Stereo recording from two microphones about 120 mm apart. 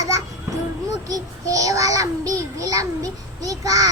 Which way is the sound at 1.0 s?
30° right (ahead or behind).